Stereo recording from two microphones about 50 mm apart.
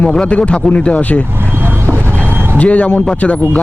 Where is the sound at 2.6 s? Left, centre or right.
Left.